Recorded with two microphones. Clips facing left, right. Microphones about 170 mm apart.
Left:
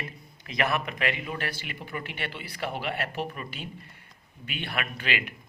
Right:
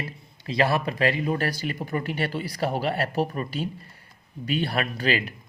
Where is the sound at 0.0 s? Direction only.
30° right (ahead or behind).